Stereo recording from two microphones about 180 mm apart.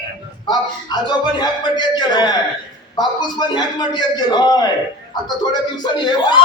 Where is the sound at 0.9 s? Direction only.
25° left (ahead or behind).